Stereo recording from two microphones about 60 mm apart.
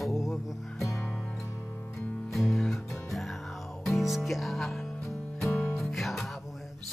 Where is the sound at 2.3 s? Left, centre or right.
Centre.